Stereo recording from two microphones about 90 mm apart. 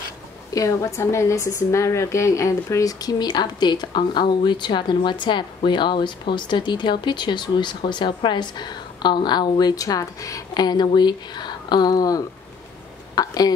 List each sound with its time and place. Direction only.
0.5 s a woman's voice: 35° left (ahead or behind)